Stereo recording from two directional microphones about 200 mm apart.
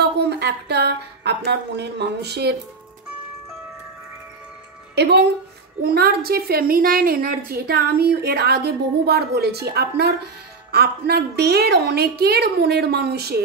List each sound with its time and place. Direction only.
0.2 s speech: 55° right (ahead or behind)
4.9 s a woman's voice: 55° right (ahead or behind)